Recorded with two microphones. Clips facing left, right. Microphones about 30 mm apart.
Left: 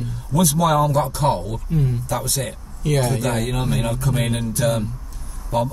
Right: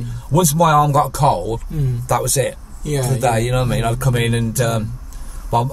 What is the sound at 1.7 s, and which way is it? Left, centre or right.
Speech, centre.